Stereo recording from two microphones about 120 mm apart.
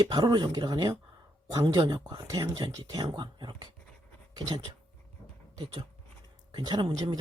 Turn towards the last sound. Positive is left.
turn(degrees=-35)  # may be behind; listen again after turning